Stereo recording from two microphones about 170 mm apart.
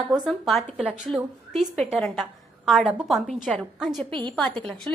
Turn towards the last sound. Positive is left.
turn(degrees=5)  # may be behind; listen again after turning